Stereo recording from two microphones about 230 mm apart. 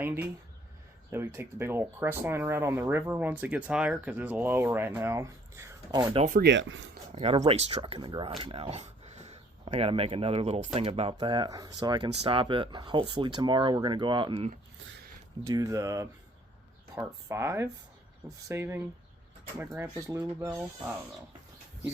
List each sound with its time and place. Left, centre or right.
0.0 s speech: centre
6.2 s speech: right
6.5 s speech: right
7.1 s speech: right
15.4 s speech: centre